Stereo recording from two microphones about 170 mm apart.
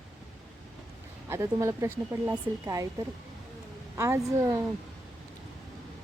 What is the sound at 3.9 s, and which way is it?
Speech, 15° right (ahead or behind).